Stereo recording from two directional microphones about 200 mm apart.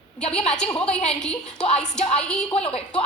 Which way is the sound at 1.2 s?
5° left (ahead or behind).